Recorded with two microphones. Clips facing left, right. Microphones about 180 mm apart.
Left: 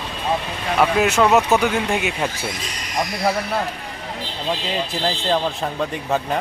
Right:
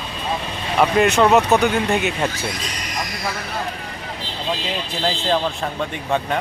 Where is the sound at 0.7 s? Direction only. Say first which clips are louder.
Right 1 dB; 5° left (ahead or behind).